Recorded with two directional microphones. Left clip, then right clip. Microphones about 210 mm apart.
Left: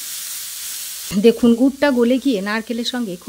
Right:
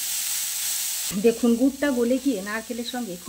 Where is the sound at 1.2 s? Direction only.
50° left (ahead or behind).